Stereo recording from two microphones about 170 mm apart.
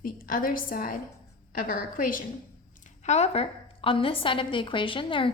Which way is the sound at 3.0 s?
40° left (ahead or behind).